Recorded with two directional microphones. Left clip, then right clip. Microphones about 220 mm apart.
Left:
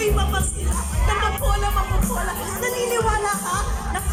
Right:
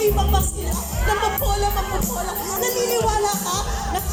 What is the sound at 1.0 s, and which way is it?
Speech, 20° right (ahead or behind).